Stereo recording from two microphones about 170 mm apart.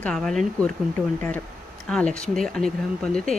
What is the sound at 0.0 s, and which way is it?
Speech, centre (ahead or behind).